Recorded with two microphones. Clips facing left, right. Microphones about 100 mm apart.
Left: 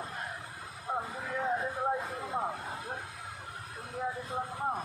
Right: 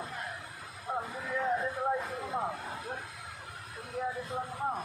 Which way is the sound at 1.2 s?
25° left (ahead or behind).